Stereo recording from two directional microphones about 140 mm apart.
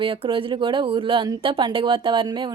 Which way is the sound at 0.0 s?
40° right (ahead or behind).